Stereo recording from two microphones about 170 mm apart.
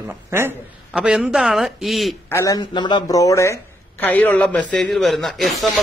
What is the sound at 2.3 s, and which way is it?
A man's voice, 20° left (ahead or behind).